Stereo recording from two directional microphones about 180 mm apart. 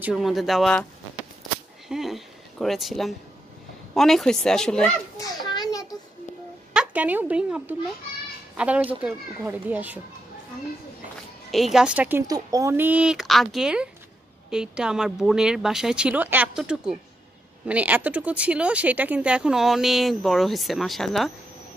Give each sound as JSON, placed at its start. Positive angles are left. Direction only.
{"t": 0.0, "sound": "speech", "side_deg": 0}
{"t": 1.9, "sound": "speech", "side_deg": 0}
{"t": 5.1, "sound": "children playing", "side_deg": 20}
{"t": 6.7, "sound": "a woman's voice", "side_deg": -5}
{"t": 11.5, "sound": "speech", "side_deg": 0}